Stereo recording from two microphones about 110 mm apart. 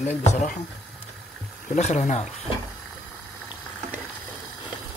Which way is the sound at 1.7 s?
90° left.